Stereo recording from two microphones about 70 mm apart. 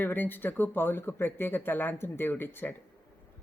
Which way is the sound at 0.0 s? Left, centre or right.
Left.